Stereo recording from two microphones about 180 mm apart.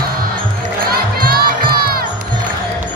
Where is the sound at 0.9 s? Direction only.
55° right (ahead or behind).